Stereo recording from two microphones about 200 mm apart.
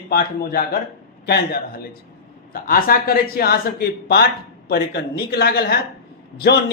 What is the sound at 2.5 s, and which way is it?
A man's voice, 45° left (ahead or behind).